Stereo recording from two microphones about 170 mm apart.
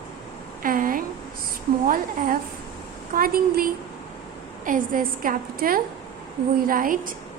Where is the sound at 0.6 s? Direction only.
55° right (ahead or behind).